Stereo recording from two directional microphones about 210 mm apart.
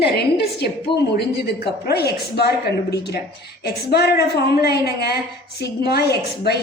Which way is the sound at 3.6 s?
50° left (ahead or behind).